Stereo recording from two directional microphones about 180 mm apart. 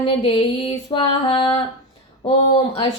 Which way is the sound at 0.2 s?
30° left (ahead or behind).